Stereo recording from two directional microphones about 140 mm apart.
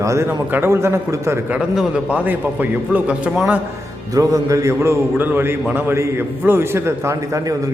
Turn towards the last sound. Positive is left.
turn(degrees=-25)  # may be behind; listen again after turning